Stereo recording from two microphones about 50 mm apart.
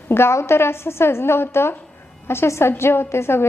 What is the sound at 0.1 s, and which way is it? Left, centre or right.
A woman's voice, left.